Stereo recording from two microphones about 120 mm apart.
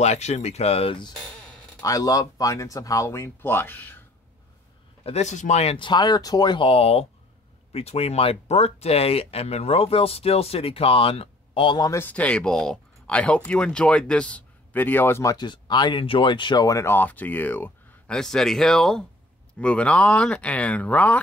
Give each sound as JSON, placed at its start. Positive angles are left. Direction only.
{"t": 0.0, "sound": "speech", "side_deg": 70}
{"t": 1.8, "sound": "speech", "side_deg": 30}
{"t": 5.0, "sound": "speech", "side_deg": 65}
{"t": 5.8, "sound": "speech", "side_deg": 40}
{"t": 11.8, "sound": "speech", "side_deg": 25}
{"t": 12.1, "sound": "speech", "side_deg": 10}
{"t": 15.3, "sound": "speech", "side_deg": 40}
{"t": 16.6, "sound": "speech", "side_deg": 25}